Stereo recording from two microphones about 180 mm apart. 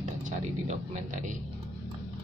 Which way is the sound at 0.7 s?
40° right (ahead or behind).